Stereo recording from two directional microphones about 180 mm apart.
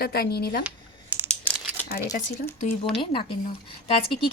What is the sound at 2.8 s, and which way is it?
Speech, 30° left (ahead or behind).